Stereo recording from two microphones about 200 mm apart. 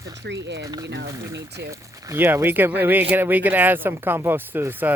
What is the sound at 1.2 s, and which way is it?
Speech, 15° right (ahead or behind).